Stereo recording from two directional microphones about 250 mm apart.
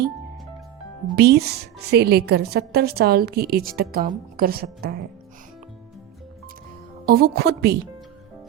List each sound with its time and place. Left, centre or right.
1.1 s speech: right
7.0 s speech: right